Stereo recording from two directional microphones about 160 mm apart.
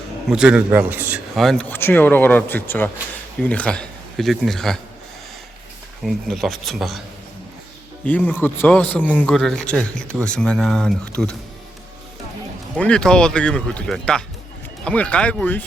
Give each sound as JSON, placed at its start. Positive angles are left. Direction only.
{"t": 0.3, "sound": "a man's voice", "side_deg": -5}
{"t": 1.4, "sound": "speech", "side_deg": 0}
{"t": 1.7, "sound": "a man's voice", "side_deg": 10}
{"t": 6.1, "sound": "speech", "side_deg": 0}
{"t": 8.0, "sound": "a man's voice", "side_deg": 10}
{"t": 12.7, "sound": "a man's voice", "side_deg": 5}